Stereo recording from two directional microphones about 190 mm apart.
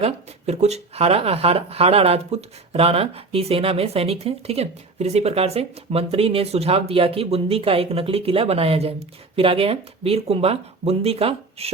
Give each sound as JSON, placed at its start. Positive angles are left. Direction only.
{"t": 0.0, "sound": "speech", "side_deg": -35}